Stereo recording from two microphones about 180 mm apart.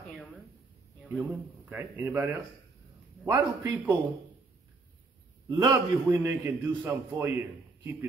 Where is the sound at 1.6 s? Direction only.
10° right (ahead or behind).